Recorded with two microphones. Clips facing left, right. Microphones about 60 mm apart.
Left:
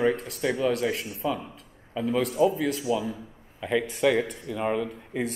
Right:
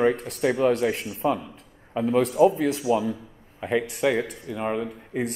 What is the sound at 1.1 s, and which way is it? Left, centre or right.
Speech, right.